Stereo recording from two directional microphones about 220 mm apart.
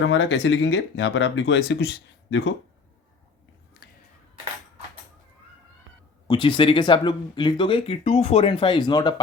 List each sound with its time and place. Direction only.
0.0 s speech: 55° left (ahead or behind)
6.2 s speech: 20° left (ahead or behind)